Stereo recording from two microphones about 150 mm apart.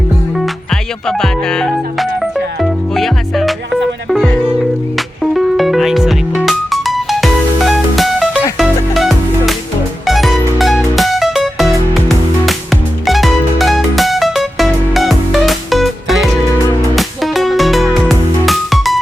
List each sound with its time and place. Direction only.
0.3 s music: centre (ahead or behind)